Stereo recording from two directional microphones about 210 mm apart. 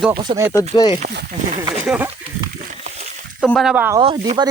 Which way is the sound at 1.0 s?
45° right (ahead or behind).